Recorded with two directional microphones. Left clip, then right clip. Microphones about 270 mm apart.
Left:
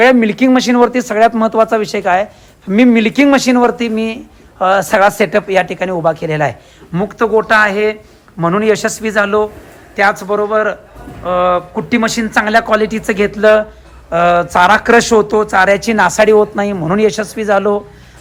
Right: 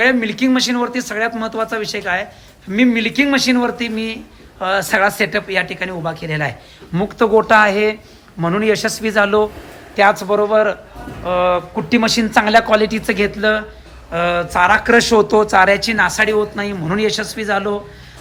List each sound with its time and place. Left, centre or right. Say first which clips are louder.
0.0 s a man's voice: left 6 dB; centre